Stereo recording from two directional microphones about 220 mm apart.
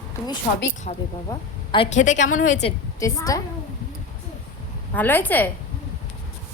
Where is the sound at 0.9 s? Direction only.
30° left (ahead or behind).